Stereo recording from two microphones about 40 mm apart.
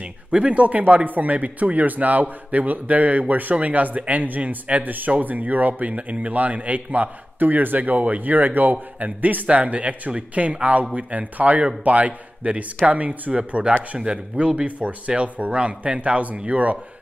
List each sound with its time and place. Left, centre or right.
0.3 s speech: right